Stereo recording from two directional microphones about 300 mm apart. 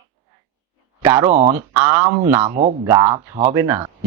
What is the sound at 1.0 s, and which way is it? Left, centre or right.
Speech, centre.